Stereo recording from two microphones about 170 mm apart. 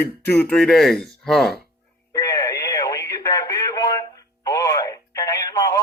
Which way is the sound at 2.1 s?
20° left (ahead or behind).